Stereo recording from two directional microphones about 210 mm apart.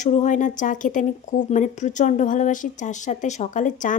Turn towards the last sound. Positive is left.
turn(degrees=35)  # may be behind; listen again after turning